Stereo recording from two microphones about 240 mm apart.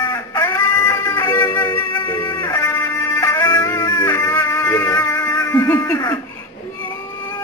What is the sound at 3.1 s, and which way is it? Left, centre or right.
Music, centre.